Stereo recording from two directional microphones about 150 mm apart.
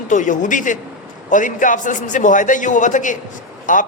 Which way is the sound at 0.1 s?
55° left (ahead or behind).